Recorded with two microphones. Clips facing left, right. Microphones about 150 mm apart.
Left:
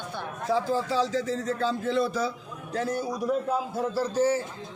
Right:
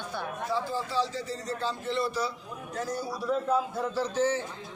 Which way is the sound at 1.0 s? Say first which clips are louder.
Left 4 dB; 90° left.